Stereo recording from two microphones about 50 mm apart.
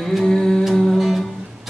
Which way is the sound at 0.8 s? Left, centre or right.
Centre.